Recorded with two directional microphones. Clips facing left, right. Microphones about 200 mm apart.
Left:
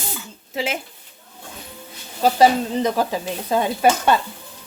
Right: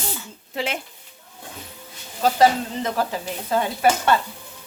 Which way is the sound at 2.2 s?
15° left (ahead or behind).